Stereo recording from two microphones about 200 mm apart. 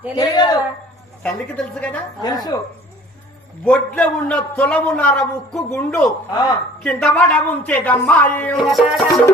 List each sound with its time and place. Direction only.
0.2 s a man's voice: 20° left (ahead or behind)
1.2 s a man's voice: 5° left (ahead or behind)
2.2 s a man's voice: 20° left (ahead or behind)
3.6 s a man's voice: 5° left (ahead or behind)